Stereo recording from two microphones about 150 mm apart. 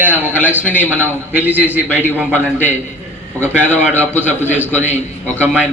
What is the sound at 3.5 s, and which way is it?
Speech, 15° right (ahead or behind).